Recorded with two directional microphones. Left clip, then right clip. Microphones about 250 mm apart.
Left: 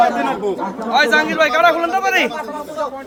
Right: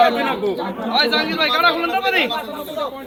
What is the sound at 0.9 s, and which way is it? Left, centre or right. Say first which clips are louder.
Speech: left 4 dB; left.